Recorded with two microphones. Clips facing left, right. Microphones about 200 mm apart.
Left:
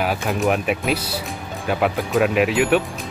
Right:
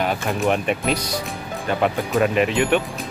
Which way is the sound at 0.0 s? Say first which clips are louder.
Left 1 dB; 5° left (ahead or behind).